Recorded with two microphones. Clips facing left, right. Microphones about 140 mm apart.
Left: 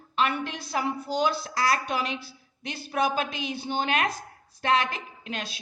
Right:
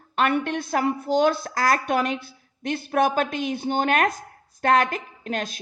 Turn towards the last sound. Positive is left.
turn(degrees=-45)  # may be behind; listen again after turning